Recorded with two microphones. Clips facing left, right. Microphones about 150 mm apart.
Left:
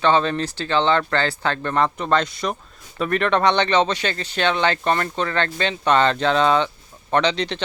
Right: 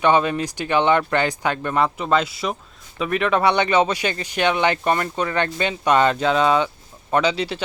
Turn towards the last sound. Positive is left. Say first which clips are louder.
# even
turn(degrees=-10)  # may be behind; listen again after turning